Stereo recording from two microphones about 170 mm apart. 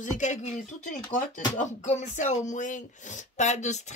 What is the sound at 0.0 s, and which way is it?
Speech, 45° left (ahead or behind).